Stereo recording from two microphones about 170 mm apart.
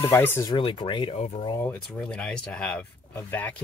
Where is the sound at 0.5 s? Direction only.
30° left (ahead or behind).